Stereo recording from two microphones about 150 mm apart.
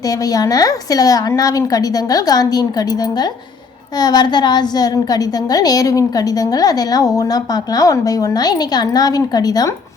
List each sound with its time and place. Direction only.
0.3 s a woman's voice: 25° left (ahead or behind)